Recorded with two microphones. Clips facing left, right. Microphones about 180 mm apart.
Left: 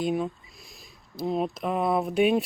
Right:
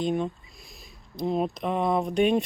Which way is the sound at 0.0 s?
5° left (ahead or behind).